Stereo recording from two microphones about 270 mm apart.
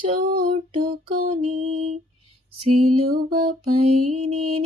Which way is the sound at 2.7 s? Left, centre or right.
Right.